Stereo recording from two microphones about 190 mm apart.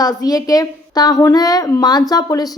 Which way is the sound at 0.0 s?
20° left (ahead or behind).